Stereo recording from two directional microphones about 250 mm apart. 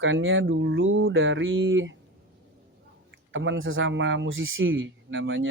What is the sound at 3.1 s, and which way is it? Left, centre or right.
Speech, right.